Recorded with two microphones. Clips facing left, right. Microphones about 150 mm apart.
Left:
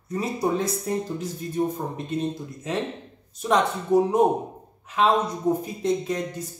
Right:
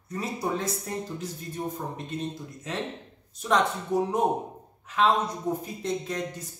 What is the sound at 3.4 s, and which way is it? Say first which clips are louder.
Speech: left 3 dB; 10° left (ahead or behind).